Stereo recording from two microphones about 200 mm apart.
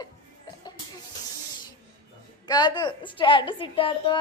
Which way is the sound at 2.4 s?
20° left (ahead or behind).